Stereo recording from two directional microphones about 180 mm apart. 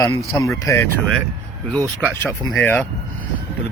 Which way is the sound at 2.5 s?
10° left (ahead or behind).